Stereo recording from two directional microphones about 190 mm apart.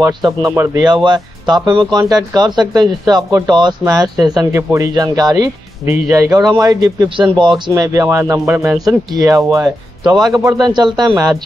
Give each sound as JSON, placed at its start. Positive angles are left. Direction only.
{"t": 0.0, "sound": "speech", "side_deg": -15}